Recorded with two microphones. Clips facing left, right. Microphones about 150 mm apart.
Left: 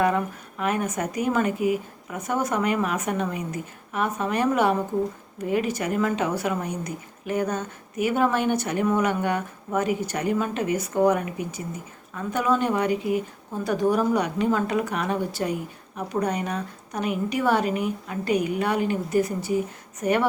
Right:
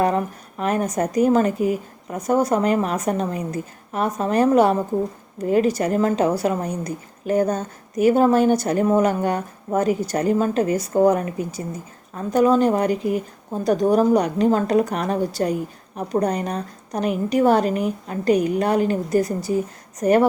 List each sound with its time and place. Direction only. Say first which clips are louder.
0.0 s a woman's voice: right 3 dB; 35° right (ahead or behind)